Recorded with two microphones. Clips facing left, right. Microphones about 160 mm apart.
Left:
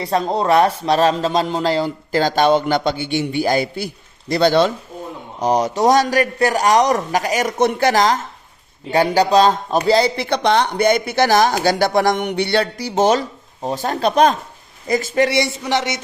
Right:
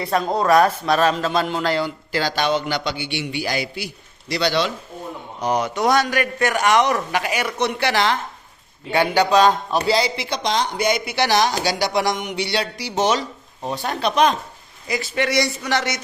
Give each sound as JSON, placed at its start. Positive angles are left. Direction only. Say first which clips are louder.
{"t": 0.0, "sound": "speech", "louder": "left 2 dB", "side_deg": 30}
{"t": 9.9, "sound": "speech", "louder": "left 8 dB", "side_deg": 55}
{"t": 15.3, "sound": "speech", "louder": "left 2 dB", "side_deg": 25}